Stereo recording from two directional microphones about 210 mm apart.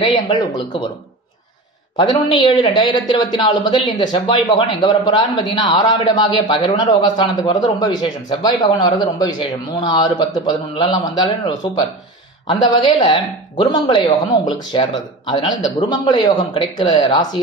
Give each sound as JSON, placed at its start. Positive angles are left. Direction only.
{"t": 0.0, "sound": "speech", "side_deg": 20}
{"t": 2.0, "sound": "speech", "side_deg": 20}